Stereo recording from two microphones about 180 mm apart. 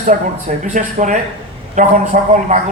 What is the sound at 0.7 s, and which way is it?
A man's voice, 45° right (ahead or behind).